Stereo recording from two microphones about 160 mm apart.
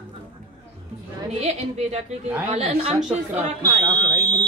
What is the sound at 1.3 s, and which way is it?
Speech, 45° right (ahead or behind).